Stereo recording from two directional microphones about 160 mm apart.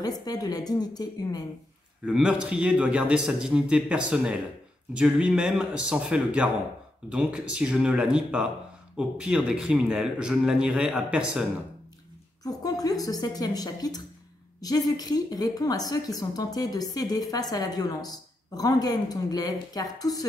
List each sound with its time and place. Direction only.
0.0 s a woman's voice: 25° left (ahead or behind)
2.0 s a man's voice: 5° right (ahead or behind)
12.4 s a woman's voice: 25° left (ahead or behind)